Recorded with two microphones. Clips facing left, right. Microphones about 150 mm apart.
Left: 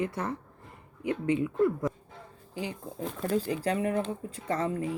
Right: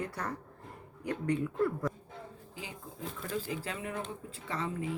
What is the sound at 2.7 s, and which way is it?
Speech, 40° left (ahead or behind).